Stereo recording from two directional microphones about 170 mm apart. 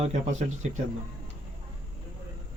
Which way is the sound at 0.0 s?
45° right (ahead or behind).